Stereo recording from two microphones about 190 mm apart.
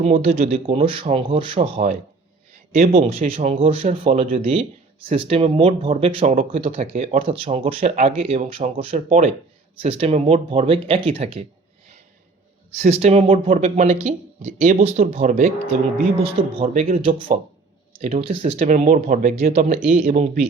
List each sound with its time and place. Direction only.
0.0 s speech: 35° right (ahead or behind)
12.7 s speech: 35° right (ahead or behind)